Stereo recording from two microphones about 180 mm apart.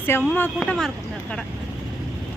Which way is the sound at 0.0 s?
10° left (ahead or behind).